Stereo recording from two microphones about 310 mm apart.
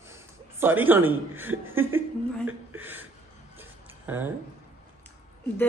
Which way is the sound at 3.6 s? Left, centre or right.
Centre.